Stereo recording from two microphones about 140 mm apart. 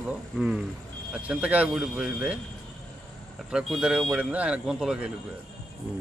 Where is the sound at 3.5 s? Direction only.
5° right (ahead or behind).